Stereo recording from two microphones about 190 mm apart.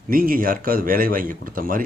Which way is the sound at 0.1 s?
50° right (ahead or behind).